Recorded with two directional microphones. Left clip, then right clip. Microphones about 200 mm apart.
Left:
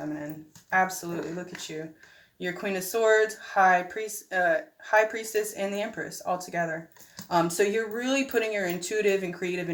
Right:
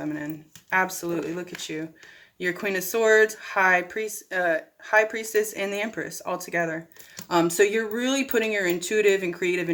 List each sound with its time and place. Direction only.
0.7 s speech: 25° right (ahead or behind)